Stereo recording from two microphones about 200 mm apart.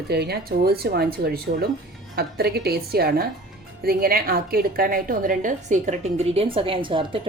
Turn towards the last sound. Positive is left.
turn(degrees=-25)  # may be behind; listen again after turning